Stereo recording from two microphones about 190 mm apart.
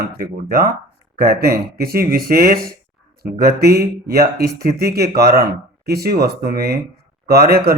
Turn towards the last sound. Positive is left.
turn(degrees=-55)  # may be behind; listen again after turning